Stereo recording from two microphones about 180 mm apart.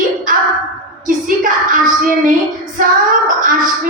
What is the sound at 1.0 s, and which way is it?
Speech, 50° right (ahead or behind).